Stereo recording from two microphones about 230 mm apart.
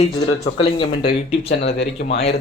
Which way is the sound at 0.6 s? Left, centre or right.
Left.